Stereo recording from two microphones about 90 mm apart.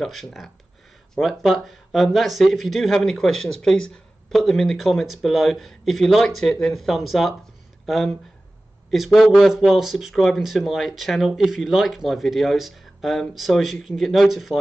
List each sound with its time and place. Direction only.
0.0 s speech: centre (ahead or behind)